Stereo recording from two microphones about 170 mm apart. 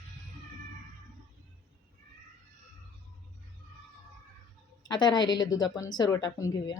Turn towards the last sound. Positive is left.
turn(degrees=20)  # may be behind; listen again after turning